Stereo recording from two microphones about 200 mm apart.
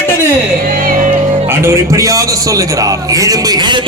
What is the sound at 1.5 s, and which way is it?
A man's voice, 15° right (ahead or behind).